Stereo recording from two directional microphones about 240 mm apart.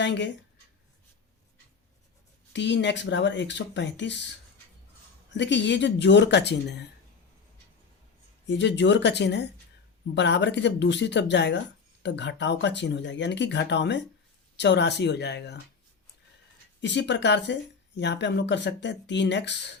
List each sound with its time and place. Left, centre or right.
0.0 s speech: left
2.5 s speech: left
5.3 s speech: left
8.4 s speech: left
16.8 s speech: left